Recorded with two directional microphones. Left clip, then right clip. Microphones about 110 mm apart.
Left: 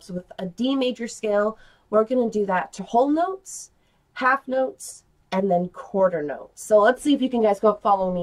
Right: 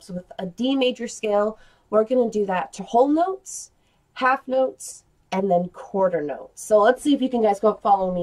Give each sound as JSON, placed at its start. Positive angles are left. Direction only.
{"t": 0.0, "sound": "speech", "side_deg": 10}